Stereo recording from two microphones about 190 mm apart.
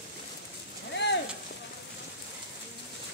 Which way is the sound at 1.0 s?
65° left (ahead or behind).